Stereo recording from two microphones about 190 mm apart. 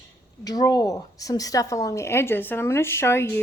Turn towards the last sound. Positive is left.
turn(degrees=15)  # may be behind; listen again after turning